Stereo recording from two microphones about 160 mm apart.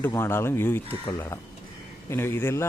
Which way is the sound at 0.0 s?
15° left (ahead or behind).